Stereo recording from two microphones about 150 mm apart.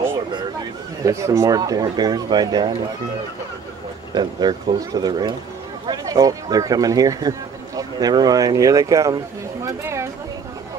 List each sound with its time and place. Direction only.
1.0 s speech: 20° right (ahead or behind)
4.1 s speech: 30° right (ahead or behind)
9.7 s a sound: 20° right (ahead or behind)